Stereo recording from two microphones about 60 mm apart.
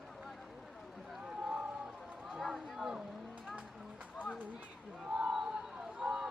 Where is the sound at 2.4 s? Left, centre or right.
Centre.